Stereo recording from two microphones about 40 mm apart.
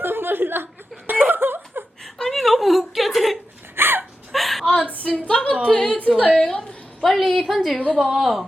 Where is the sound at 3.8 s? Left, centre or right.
Right.